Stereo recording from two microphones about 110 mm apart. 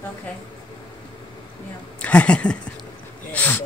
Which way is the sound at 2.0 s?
10° left (ahead or behind).